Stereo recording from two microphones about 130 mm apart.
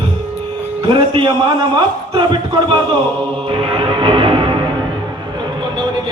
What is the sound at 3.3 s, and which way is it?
Music, 45° right (ahead or behind).